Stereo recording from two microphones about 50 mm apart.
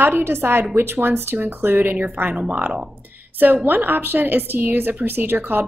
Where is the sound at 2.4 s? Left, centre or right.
Right.